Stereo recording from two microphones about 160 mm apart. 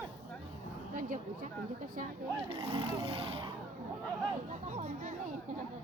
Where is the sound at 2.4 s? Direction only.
35° right (ahead or behind).